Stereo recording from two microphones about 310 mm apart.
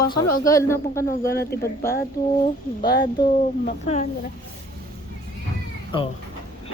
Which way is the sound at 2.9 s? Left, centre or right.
Left.